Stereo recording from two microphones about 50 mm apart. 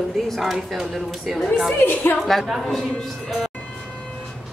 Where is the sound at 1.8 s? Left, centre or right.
Left.